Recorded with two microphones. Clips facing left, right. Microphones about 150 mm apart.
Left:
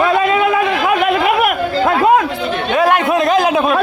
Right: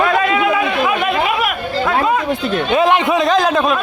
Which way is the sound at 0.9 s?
55° left (ahead or behind).